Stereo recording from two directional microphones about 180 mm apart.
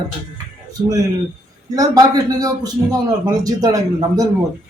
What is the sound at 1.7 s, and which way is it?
Speech, 20° right (ahead or behind).